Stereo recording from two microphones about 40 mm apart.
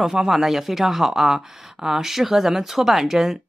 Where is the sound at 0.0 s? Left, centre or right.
Centre.